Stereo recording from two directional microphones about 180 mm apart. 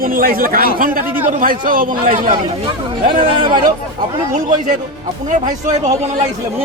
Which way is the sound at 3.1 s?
30° right (ahead or behind).